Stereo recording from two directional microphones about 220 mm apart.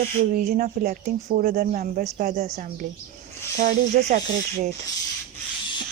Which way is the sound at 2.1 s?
30° right (ahead or behind).